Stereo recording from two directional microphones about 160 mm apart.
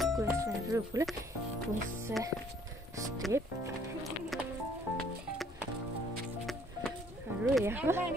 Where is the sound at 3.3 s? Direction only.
20° right (ahead or behind).